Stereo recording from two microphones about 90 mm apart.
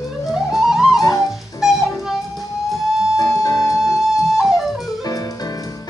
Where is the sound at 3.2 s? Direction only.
40° left (ahead or behind).